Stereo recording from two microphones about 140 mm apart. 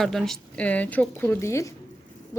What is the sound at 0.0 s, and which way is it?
A woman's voice, centre (ahead or behind).